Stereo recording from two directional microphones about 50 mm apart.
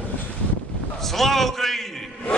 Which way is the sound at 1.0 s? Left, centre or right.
Centre.